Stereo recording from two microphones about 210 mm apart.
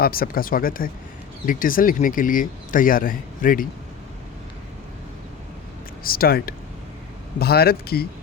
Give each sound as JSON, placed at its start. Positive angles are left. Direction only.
{"t": 0.0, "sound": "speech", "side_deg": 45}
{"t": 6.0, "sound": "speech", "side_deg": 45}